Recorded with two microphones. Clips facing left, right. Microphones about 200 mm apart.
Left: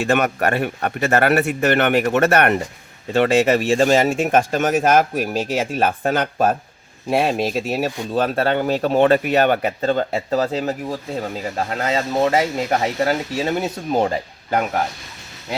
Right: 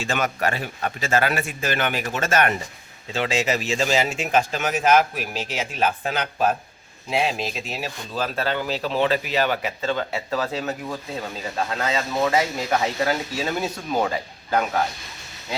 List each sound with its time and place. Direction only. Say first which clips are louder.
0.0 s speech: left 6 dB; 60° left (ahead or behind)
7.1 s speech: left 6 dB; 55° left (ahead or behind); by 14.6 s 25° left (ahead or behind)